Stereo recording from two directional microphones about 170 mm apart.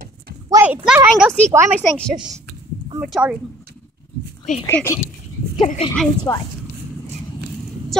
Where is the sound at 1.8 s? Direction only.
5° left (ahead or behind).